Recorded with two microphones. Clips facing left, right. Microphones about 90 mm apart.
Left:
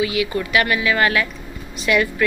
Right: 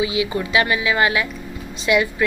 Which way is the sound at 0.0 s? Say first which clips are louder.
Even; 20° right (ahead or behind).